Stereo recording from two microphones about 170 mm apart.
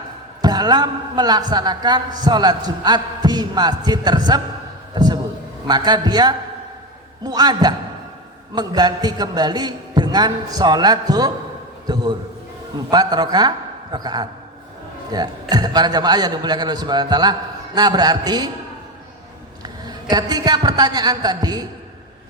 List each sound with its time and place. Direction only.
0.4 s a man's voice: 25° right (ahead or behind)
4.9 s a sound: 25° right (ahead or behind)
5.6 s a man's voice: 25° right (ahead or behind)
19.6 s a man's voice: 25° right (ahead or behind)